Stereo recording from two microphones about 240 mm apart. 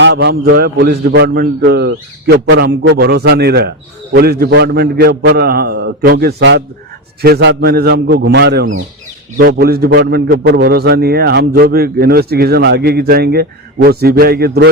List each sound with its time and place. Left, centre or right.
0.0 s a man's voice: right